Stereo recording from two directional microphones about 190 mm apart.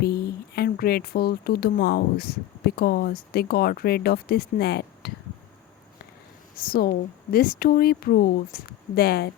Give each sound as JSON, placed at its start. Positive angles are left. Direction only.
{"t": 0.0, "sound": "speech", "side_deg": 55}
{"t": 6.6, "sound": "speech", "side_deg": 50}